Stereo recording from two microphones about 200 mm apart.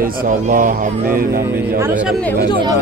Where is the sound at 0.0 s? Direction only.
45° right (ahead or behind).